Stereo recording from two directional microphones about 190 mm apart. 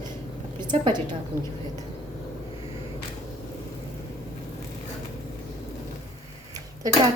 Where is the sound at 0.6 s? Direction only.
25° right (ahead or behind).